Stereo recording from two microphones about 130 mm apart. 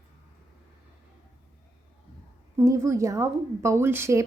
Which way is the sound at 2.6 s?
25° right (ahead or behind).